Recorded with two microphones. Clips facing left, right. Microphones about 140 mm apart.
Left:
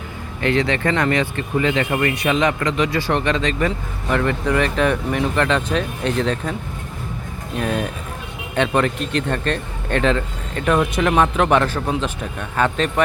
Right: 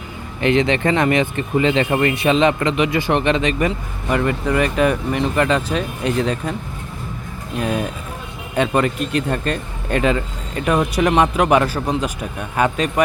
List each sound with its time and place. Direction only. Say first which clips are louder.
0.4 s speech: right 3 dB; 20° right (ahead or behind)
3.7 s speech: right 1 dB; 5° right (ahead or behind)
7.6 s speech: right 1 dB; 10° right (ahead or behind)